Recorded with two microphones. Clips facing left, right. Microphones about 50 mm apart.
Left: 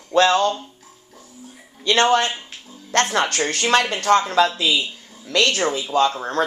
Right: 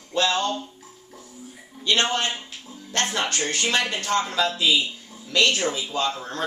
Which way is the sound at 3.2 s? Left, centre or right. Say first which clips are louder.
Left 4 dB; left.